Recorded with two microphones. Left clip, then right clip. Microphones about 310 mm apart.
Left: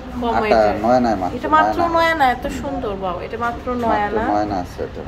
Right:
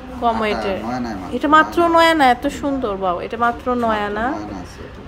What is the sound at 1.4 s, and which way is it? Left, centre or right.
A woman's voice, right.